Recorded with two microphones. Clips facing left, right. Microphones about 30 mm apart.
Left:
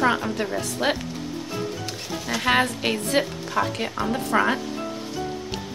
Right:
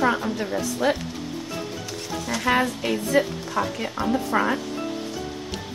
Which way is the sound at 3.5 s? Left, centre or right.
Left.